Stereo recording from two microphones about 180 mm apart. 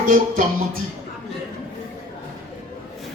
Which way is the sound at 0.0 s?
50° right (ahead or behind).